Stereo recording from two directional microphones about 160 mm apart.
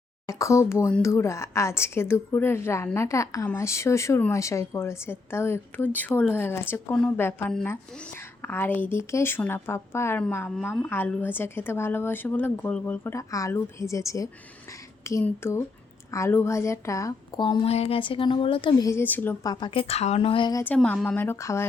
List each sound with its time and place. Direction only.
0.3 s a woman's voice: 20° left (ahead or behind)
18.9 s a woman's voice: 15° left (ahead or behind)
19.5 s a woman's voice: 30° left (ahead or behind)
20.7 s a woman's voice: 5° left (ahead or behind)